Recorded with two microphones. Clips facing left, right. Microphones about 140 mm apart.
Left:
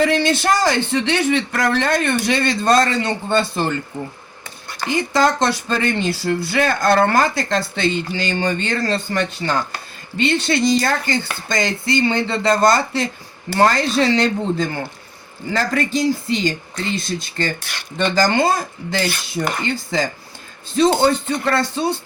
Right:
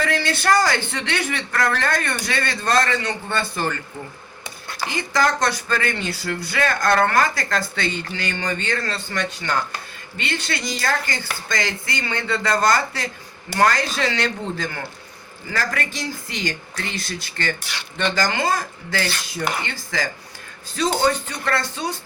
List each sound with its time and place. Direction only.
0.0 s speech: 20° left (ahead or behind)
4.9 s speech: 25° left (ahead or behind)
17.6 s speech: 55° left (ahead or behind)
17.9 s speech: 35° left (ahead or behind)
20.8 s speech: 25° left (ahead or behind)